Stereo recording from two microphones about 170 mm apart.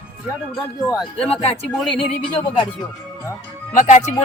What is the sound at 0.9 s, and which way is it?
Speech, centre (ahead or behind).